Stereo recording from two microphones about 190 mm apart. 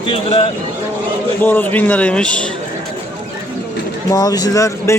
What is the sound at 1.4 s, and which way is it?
Speech, 10° left (ahead or behind).